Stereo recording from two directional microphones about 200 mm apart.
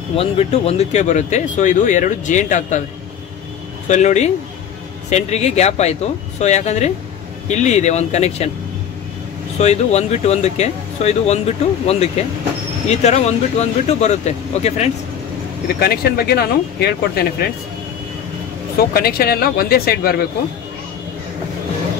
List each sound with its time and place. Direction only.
0.1 s speech: 30° left (ahead or behind)
3.9 s speech: 35° left (ahead or behind)
9.6 s speech: 35° left (ahead or behind)
15.8 s speech: 50° left (ahead or behind)
18.8 s speech: 50° left (ahead or behind)